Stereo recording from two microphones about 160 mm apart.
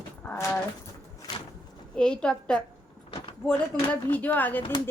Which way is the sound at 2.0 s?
5° left (ahead or behind).